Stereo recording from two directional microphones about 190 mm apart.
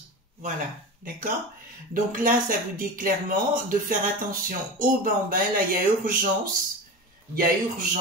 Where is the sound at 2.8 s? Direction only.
45° right (ahead or behind).